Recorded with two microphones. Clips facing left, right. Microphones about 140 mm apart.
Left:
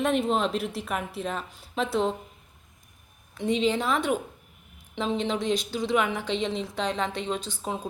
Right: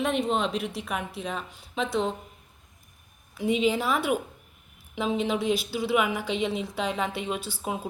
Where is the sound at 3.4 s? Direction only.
5° right (ahead or behind).